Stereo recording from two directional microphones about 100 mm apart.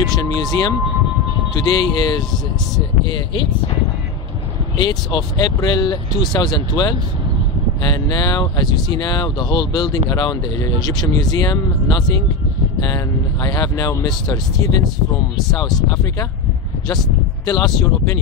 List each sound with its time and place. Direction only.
0.0 s speech: 40° left (ahead or behind)
4.7 s speech: 45° left (ahead or behind)
17.5 s speech: 45° left (ahead or behind)